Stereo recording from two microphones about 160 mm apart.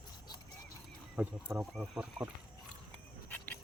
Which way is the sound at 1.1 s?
5° right (ahead or behind).